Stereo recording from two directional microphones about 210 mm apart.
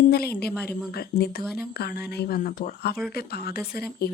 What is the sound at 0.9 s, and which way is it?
Speech, 45° left (ahead or behind).